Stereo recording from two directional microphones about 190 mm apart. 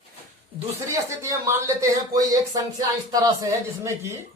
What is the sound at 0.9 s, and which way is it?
Speech, 15° right (ahead or behind).